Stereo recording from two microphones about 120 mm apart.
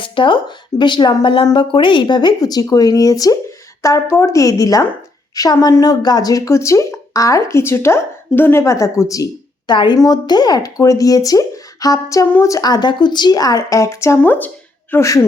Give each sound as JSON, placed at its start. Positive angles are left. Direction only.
{"t": 0.0, "sound": "a woman's voice", "side_deg": 45}
{"t": 9.7, "sound": "speech", "side_deg": 40}
{"t": 14.2, "sound": "speech", "side_deg": 15}